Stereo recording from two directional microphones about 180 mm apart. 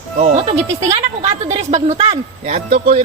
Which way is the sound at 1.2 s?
35° right (ahead or behind).